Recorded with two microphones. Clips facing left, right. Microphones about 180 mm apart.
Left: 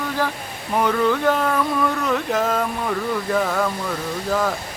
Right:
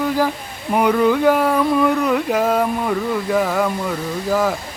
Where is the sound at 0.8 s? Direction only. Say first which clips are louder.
Right 4 dB; 10° right (ahead or behind).